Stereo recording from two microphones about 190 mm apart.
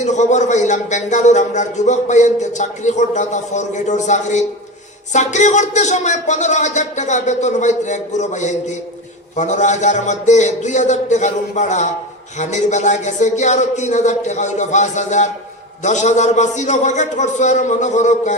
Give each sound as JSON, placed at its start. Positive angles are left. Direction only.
{"t": 0.0, "sound": "a man's voice", "side_deg": 40}